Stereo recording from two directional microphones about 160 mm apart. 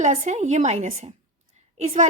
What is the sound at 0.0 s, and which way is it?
A woman's voice, 45° right (ahead or behind).